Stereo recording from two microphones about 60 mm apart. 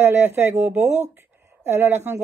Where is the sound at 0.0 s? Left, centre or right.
Right.